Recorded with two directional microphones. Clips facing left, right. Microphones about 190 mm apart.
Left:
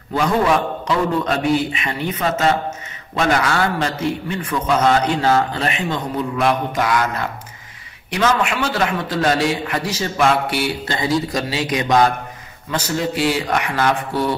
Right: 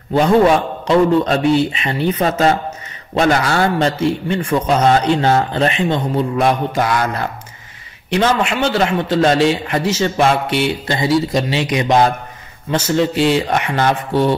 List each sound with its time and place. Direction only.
0.1 s a man's voice: 30° right (ahead or behind)